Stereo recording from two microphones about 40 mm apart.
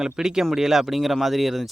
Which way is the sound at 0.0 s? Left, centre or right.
Centre.